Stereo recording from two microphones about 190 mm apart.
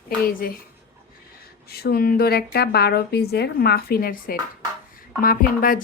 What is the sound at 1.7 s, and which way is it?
Speech, 55° left (ahead or behind).